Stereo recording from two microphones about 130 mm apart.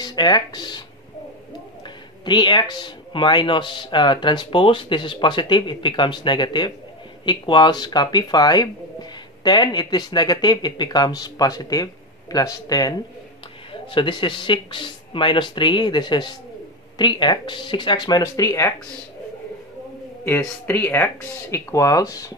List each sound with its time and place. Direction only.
0.0 s speech: 35° left (ahead or behind)
2.2 s speech: 35° left (ahead or behind)
13.8 s speech: 40° left (ahead or behind); by 18.7 s 25° left (ahead or behind)
20.2 s speech: 15° left (ahead or behind)